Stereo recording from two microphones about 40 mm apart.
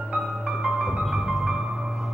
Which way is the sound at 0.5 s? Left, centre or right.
Right.